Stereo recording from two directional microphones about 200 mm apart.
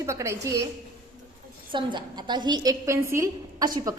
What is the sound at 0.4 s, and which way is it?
Speech, 15° right (ahead or behind).